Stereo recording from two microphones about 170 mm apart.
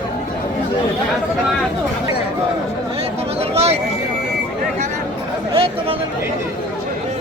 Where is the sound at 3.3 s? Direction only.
35° right (ahead or behind).